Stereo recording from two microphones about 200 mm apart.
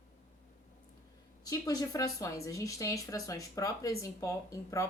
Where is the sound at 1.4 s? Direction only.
20° left (ahead or behind).